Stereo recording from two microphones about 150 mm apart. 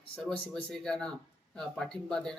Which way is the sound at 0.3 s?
5° left (ahead or behind).